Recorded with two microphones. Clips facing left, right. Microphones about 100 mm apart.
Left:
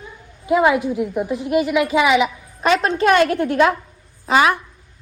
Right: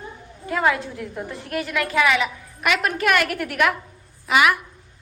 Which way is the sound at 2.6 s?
30° left (ahead or behind).